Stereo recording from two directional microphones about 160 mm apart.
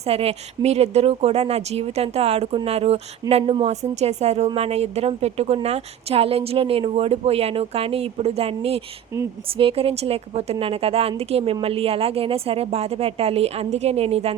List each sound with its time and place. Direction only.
0.0 s a woman's voice: 40° right (ahead or behind)